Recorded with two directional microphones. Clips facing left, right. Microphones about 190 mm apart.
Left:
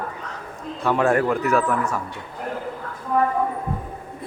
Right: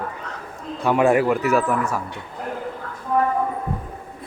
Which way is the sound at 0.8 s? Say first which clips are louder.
Right 2 dB; 10° right (ahead or behind).